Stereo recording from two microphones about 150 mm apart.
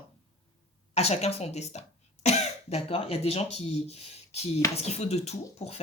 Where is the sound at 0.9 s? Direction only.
45° left (ahead or behind).